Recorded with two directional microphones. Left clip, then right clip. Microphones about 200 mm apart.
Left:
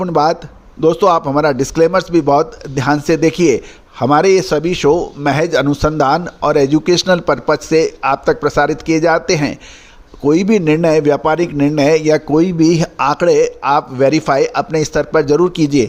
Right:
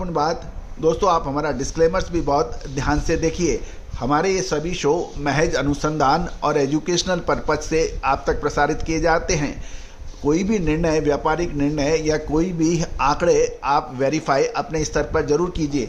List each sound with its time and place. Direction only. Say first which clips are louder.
0.0 s a man's voice: left 8 dB; 40° left (ahead or behind)